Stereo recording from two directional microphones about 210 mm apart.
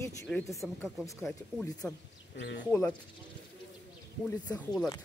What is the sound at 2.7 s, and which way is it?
Speech, 10° left (ahead or behind).